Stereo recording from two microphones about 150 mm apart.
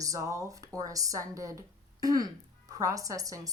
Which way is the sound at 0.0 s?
20° right (ahead or behind).